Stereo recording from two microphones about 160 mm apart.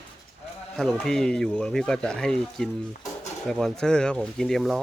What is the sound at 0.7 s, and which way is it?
Speech, centre (ahead or behind).